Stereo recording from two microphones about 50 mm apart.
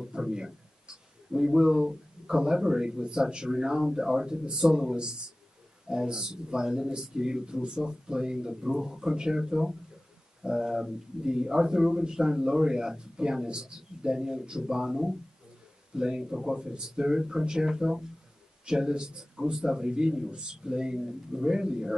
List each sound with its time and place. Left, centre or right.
0.0 s a man's voice: centre